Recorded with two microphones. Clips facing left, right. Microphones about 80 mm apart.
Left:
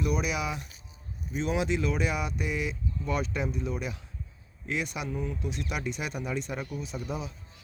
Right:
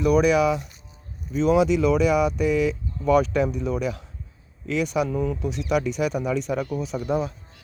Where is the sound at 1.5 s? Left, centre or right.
Right.